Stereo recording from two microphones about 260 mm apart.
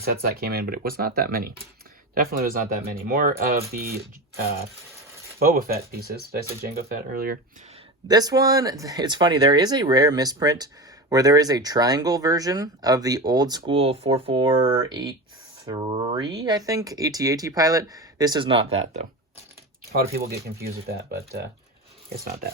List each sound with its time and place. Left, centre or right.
0.0 s speech: right
5.4 s speech: right
8.0 s speech: centre
19.9 s speech: right